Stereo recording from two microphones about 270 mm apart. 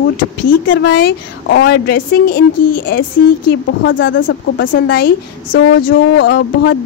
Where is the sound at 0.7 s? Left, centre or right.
Left.